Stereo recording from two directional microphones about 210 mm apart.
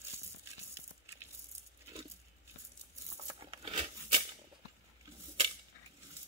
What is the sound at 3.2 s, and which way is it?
Tearing, 25° right (ahead or behind).